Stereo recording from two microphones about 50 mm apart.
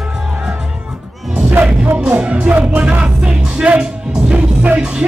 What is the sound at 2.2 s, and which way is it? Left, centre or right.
Music, right.